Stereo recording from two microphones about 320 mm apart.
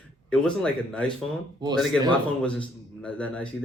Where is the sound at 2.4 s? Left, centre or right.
Centre.